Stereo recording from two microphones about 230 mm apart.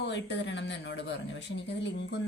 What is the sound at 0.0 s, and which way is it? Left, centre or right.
Speech, left.